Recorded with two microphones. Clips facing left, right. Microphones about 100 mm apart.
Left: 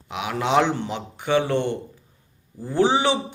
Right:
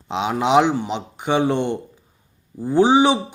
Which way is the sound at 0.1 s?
25° right (ahead or behind).